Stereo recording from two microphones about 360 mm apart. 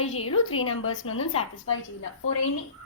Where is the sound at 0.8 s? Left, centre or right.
Left.